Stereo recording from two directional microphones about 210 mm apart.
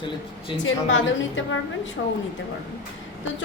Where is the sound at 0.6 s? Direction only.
65° left (ahead or behind).